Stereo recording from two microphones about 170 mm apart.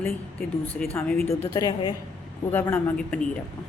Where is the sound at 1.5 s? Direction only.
25° left (ahead or behind).